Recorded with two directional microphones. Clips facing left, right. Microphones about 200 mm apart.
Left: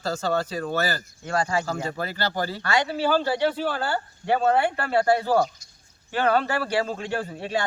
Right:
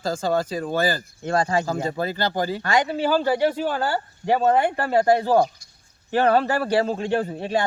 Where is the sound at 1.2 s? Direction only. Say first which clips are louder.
Right 4 dB; 35° right (ahead or behind).